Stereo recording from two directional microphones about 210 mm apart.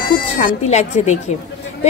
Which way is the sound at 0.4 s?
30° left (ahead or behind).